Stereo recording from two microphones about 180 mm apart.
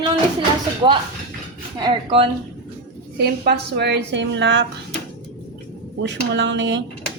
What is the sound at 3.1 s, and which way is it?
A woman's voice, 65° right (ahead or behind).